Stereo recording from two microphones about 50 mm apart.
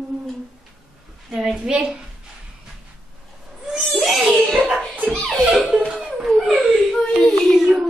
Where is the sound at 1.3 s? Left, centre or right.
Centre.